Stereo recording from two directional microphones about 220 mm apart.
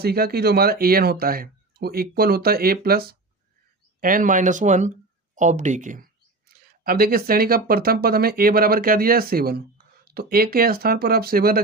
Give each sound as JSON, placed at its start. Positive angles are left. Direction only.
{"t": 0.0, "sound": "speech", "side_deg": -45}
{"t": 6.5, "sound": "a sound", "side_deg": -45}
{"t": 6.8, "sound": "speech", "side_deg": -40}